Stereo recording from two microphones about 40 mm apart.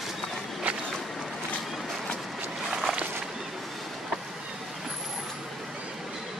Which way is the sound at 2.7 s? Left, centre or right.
Centre.